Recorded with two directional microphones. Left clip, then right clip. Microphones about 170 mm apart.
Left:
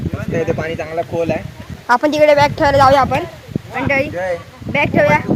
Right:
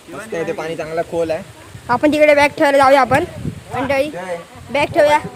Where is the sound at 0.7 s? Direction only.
25° right (ahead or behind).